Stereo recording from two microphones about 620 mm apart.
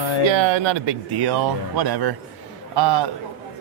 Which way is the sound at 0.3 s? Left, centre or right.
Right.